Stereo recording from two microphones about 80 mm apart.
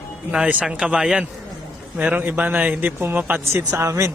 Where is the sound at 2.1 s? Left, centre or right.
Right.